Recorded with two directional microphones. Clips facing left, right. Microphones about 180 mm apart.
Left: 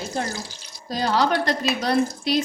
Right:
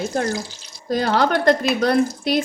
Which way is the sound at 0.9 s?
55° right (ahead or behind).